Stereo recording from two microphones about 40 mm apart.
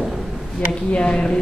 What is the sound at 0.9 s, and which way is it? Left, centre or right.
Speech, left.